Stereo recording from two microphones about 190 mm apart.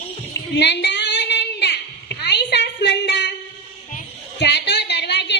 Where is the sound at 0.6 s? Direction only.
65° left (ahead or behind).